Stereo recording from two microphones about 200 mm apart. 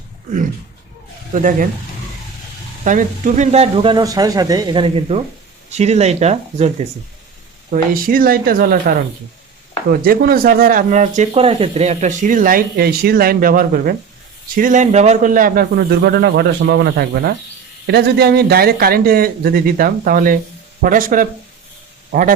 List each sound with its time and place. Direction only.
1.3 s speech: 40° right (ahead or behind)
2.8 s speech: 40° right (ahead or behind)
7.7 s speech: 45° right (ahead or behind)